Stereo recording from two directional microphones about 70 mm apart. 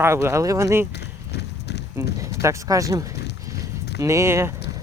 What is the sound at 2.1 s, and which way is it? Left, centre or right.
Speech, right.